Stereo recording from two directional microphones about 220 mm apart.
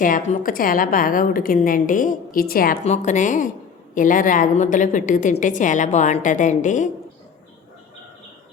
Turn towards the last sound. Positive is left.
turn(degrees=35)  # may be behind; listen again after turning